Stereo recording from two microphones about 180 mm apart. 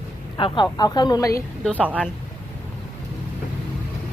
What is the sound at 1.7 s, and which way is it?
Speech, 10° right (ahead or behind).